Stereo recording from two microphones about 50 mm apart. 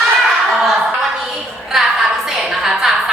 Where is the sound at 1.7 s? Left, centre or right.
Centre.